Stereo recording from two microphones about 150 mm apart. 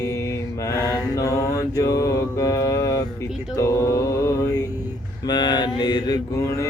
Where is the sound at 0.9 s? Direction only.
20° left (ahead or behind).